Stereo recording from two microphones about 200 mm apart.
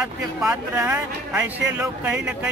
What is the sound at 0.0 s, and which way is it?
Speech, 5° right (ahead or behind).